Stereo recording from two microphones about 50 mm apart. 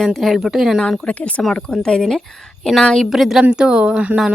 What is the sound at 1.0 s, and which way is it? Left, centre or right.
Speech, left.